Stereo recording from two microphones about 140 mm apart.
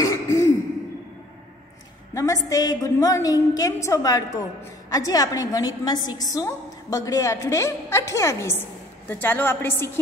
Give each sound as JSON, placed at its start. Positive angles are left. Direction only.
{"t": 0.0, "sound": "throat clearing", "side_deg": 20}
{"t": 2.1, "sound": "a woman's voice", "side_deg": 25}